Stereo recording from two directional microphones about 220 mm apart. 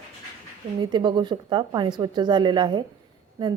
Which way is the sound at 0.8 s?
20° right (ahead or behind).